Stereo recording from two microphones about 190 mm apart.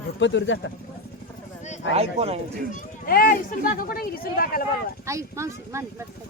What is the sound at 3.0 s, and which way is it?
Speech, 50° left (ahead or behind).